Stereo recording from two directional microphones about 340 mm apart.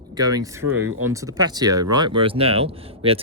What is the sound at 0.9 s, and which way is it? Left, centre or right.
Speech, right.